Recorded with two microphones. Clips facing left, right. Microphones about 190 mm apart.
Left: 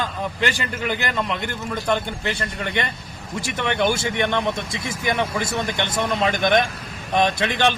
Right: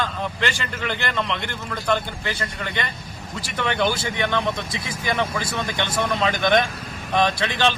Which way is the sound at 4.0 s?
20° left (ahead or behind).